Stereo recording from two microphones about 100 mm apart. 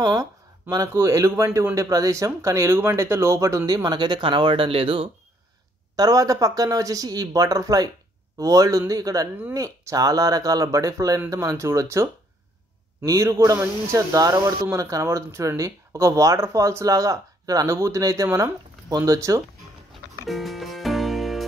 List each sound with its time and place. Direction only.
0.0 s a man's voice: 40° right (ahead or behind); by 5.1 s 65° right (ahead or behind)
5.9 s speech: 40° right (ahead or behind)
19.9 s music: centre (ahead or behind)